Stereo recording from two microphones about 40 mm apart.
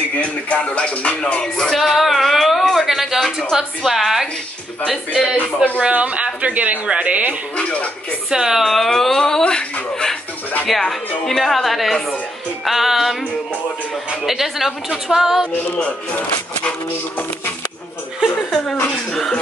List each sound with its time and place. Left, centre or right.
0.1 s music: left
1.8 s a sound: centre
3.8 s a woman's voice: centre
5.8 s speech: right
7.5 s music: left
8.3 s a woman's voice: centre
8.6 s a sound: centre
9.4 s speech: left
10.7 s a woman's voice: centre
14.2 s a woman's voice: centre